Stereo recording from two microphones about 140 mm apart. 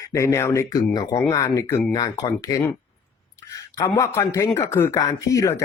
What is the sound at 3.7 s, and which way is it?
Speech, 20° left (ahead or behind).